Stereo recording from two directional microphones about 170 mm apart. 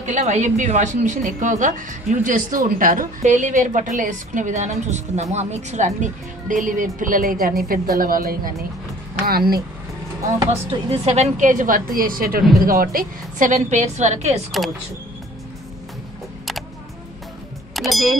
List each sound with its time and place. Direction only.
0.0 s a woman's voice: 45° right (ahead or behind)
10.4 s a woman's voice: 30° right (ahead or behind)
17.7 s speech: centre (ahead or behind)